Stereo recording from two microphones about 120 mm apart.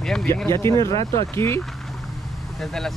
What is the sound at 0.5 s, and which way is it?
Speech, 25° left (ahead or behind).